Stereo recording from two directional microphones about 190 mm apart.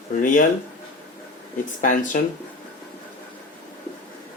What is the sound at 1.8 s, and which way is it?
Speech, 45° left (ahead or behind).